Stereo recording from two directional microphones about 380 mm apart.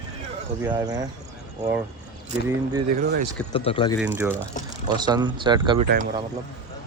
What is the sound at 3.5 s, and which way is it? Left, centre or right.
Speech, centre.